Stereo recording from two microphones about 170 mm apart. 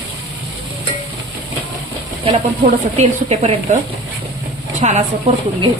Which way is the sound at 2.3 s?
40° right (ahead or behind).